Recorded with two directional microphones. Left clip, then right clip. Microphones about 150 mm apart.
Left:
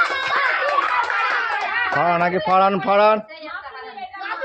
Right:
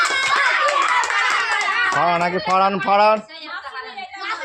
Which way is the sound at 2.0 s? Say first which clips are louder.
Even; 40° left (ahead or behind).